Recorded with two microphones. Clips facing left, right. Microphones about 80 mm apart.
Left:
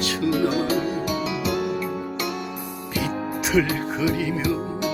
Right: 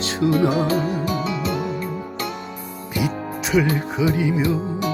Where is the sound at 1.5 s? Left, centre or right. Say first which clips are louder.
Even; left.